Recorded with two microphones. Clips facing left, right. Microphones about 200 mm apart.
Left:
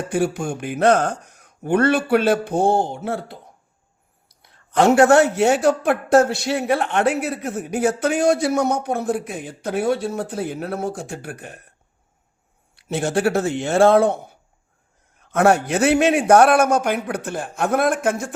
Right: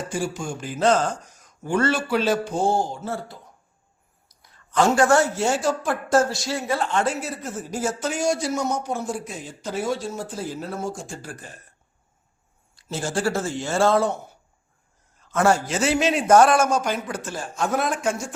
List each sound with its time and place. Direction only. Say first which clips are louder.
0.1 s speech: left 9 dB; 60° left (ahead or behind)
4.3 s a sound: even; 60° left (ahead or behind)
4.9 s speech: left 5 dB; 65° left (ahead or behind)
12.7 s speech: left 6 dB; 65° left (ahead or behind)
15.2 s speech: left 4 dB; 60° left (ahead or behind)